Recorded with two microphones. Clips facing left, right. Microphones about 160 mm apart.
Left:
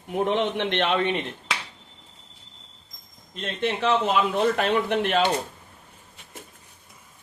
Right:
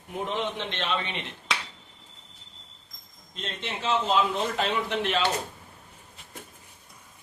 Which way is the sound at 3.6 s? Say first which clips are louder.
Left 6 dB; 60° left (ahead or behind).